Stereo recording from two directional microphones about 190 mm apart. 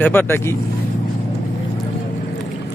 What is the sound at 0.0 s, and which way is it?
Speech, 10° left (ahead or behind).